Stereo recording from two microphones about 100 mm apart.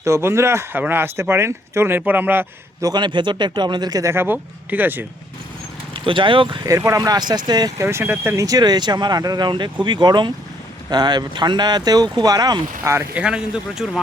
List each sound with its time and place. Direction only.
0.0 s speech: 25° right (ahead or behind)
2.8 s speech: 45° right (ahead or behind)
4.1 s speech: 20° right (ahead or behind)
5.9 s speech: 55° right (ahead or behind)
6.7 s speech: 30° right (ahead or behind)
7.9 s speech: 25° right (ahead or behind)
8.4 s speech: 40° right (ahead or behind)
12.8 s speech: 25° right (ahead or behind)
13.1 s speech: 10° right (ahead or behind)